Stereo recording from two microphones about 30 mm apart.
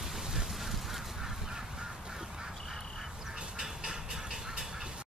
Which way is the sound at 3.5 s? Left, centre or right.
Right.